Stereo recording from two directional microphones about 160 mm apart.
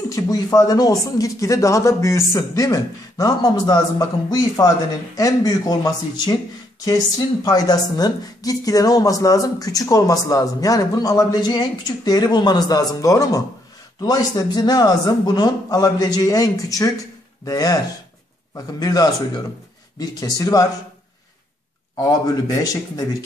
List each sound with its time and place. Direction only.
0.1 s speech: 25° left (ahead or behind)
7.4 s speech: 25° left (ahead or behind)
18.8 s speech: 25° left (ahead or behind)
22.5 s speech: 25° left (ahead or behind)